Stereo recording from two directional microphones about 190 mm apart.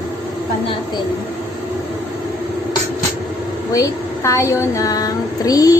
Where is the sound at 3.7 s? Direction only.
15° left (ahead or behind).